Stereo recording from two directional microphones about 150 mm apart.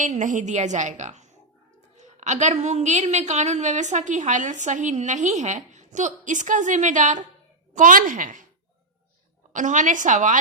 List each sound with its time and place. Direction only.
0.0 s a woman's voice: 55° right (ahead or behind)
9.5 s a woman's voice: 60° right (ahead or behind)